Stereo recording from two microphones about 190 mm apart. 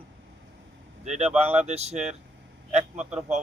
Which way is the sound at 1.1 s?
35° right (ahead or behind).